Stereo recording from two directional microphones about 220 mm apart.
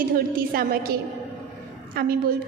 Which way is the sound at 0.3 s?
40° right (ahead or behind).